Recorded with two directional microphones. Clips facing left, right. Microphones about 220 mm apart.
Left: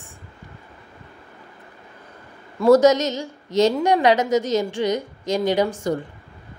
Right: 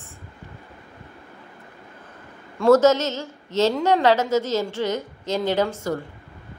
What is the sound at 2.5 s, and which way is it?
A woman's voice, 10° left (ahead or behind).